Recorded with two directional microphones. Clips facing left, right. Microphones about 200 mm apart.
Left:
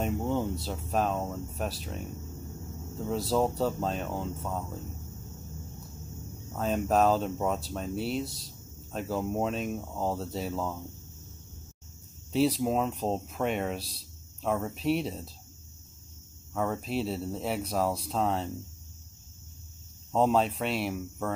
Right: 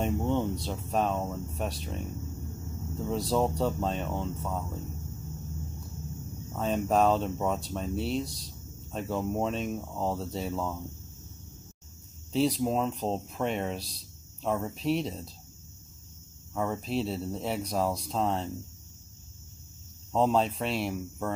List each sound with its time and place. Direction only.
0.0 s speech: centre (ahead or behind)
6.5 s speech: centre (ahead or behind)
12.3 s speech: 5° left (ahead or behind)
16.5 s speech: centre (ahead or behind)
20.1 s speech: 5° left (ahead or behind)